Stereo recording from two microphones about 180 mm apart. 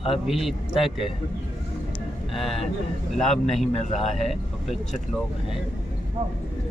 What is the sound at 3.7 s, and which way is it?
Speech, 40° left (ahead or behind).